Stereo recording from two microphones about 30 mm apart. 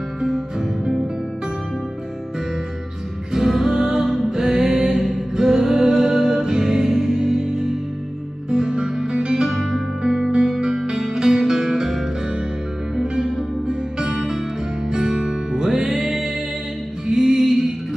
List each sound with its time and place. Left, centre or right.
3.3 s music: centre
14.9 s music: right